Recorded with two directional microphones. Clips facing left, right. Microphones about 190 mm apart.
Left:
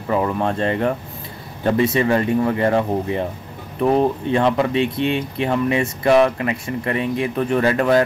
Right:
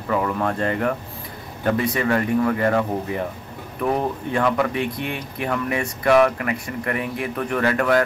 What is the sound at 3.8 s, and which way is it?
Speech, 25° left (ahead or behind).